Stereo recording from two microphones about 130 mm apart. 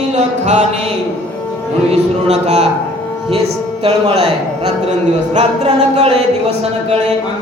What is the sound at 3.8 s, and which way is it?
Speech, 55° right (ahead or behind).